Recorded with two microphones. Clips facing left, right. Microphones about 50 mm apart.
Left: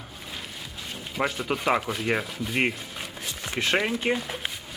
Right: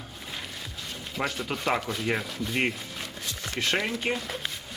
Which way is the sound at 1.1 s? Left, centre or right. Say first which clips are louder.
Left 4 dB; centre.